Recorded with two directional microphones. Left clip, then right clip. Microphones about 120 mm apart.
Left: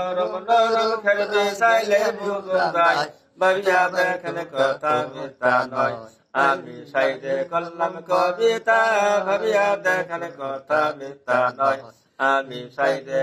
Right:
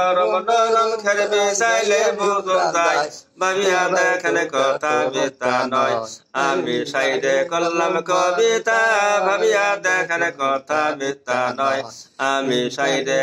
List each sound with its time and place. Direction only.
0.0 s mantra: 30° right (ahead or behind)